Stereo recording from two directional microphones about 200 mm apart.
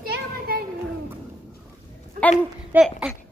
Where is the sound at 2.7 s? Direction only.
5° right (ahead or behind).